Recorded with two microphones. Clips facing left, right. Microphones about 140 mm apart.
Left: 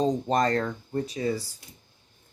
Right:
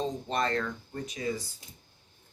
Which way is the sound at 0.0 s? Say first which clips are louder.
Left 7 dB; 40° left (ahead or behind).